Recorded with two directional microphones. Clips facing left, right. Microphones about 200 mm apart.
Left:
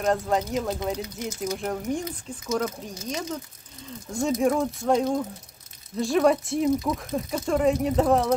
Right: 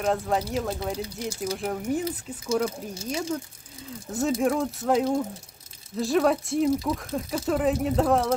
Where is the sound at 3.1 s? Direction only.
10° right (ahead or behind).